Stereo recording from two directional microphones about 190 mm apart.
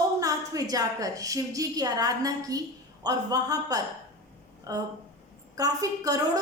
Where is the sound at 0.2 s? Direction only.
20° right (ahead or behind).